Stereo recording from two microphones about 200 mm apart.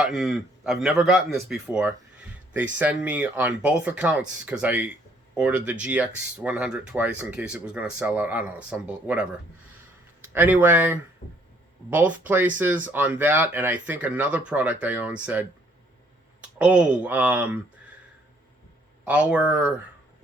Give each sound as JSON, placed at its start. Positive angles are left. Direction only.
{"t": 0.0, "sound": "speech", "side_deg": 0}
{"t": 10.3, "sound": "speech", "side_deg": -10}
{"t": 11.2, "sound": "speech", "side_deg": 35}
{"t": 11.9, "sound": "speech", "side_deg": -10}
{"t": 19.0, "sound": "speech", "side_deg": -5}